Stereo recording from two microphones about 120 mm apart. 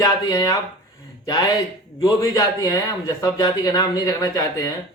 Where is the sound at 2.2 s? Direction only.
30° left (ahead or behind).